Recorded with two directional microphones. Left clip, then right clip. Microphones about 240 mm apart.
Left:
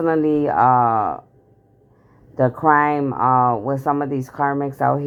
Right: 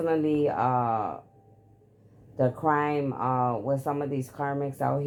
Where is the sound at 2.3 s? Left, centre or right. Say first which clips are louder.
Left 9 dB; left.